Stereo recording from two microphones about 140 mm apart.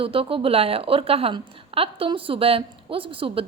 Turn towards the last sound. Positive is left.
turn(degrees=-40)  # may be behind; listen again after turning